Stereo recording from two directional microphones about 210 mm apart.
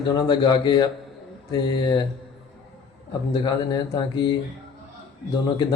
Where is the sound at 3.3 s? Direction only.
20° left (ahead or behind).